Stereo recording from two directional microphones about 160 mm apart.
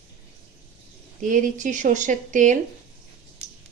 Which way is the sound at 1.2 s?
50° right (ahead or behind).